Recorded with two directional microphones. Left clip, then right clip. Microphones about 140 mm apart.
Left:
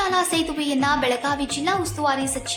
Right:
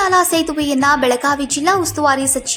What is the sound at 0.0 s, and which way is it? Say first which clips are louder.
Speech: right 7 dB; 40° right (ahead or behind).